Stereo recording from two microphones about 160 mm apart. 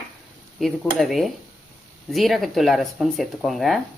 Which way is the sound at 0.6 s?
Centre (ahead or behind).